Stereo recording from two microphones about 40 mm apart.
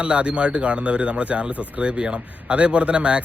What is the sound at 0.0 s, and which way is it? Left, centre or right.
Speech, right.